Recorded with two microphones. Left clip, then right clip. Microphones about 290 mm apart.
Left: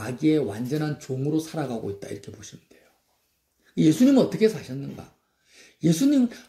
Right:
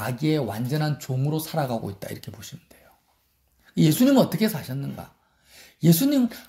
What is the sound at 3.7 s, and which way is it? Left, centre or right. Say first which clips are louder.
Speech: left 1 dB; right.